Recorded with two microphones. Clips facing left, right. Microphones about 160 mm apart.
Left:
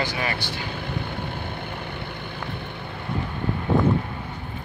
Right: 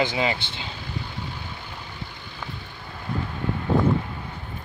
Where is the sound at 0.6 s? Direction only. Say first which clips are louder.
Left 4 dB; 60° left (ahead or behind).